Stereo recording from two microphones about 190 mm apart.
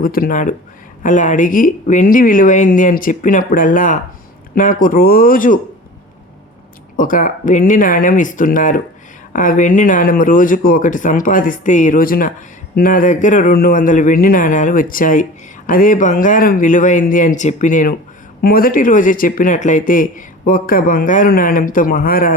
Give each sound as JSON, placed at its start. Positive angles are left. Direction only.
{"t": 0.0, "sound": "a man's voice", "side_deg": 50}
{"t": 6.9, "sound": "a man's voice", "side_deg": 45}